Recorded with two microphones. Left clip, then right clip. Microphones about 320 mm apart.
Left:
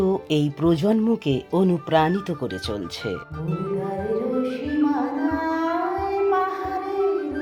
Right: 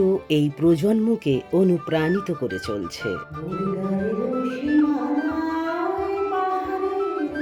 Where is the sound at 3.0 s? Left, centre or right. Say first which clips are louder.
Right 1 dB; centre.